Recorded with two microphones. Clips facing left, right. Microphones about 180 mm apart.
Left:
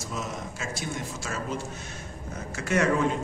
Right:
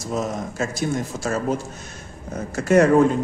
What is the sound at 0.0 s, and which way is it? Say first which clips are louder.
A man's voice: right 9 dB; 40° right (ahead or behind).